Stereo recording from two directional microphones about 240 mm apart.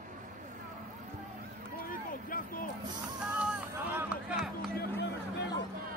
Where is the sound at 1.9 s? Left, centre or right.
Left.